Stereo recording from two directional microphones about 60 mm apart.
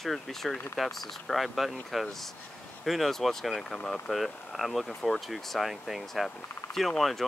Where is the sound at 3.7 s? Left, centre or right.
Centre.